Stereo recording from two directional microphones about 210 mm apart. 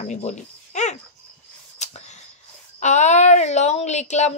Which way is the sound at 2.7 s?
35° left (ahead or behind).